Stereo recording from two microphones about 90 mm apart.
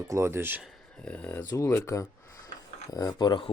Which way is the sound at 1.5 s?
35° left (ahead or behind).